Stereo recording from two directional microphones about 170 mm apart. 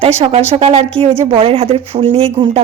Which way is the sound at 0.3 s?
35° right (ahead or behind).